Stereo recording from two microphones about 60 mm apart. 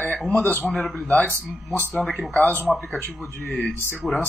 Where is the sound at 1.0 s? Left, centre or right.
Left.